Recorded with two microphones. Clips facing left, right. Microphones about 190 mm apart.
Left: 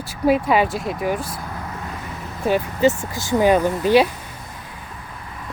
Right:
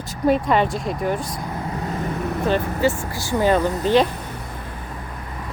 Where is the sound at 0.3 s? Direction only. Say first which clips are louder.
Left 1 dB; 5° left (ahead or behind).